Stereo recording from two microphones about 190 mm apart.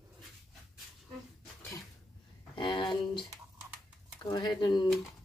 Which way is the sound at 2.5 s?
25° left (ahead or behind).